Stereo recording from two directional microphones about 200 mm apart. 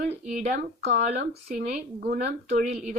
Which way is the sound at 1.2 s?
55° right (ahead or behind).